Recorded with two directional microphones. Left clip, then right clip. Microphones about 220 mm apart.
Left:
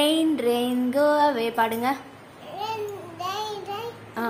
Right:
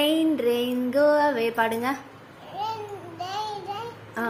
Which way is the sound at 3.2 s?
20° left (ahead or behind).